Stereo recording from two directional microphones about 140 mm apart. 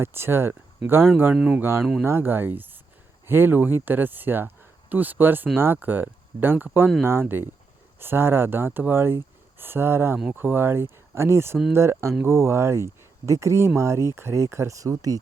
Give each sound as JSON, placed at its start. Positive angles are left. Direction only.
{"t": 0.0, "sound": "speech", "side_deg": -15}
{"t": 1.8, "sound": "speech", "side_deg": 0}
{"t": 2.0, "sound": "speech", "side_deg": -15}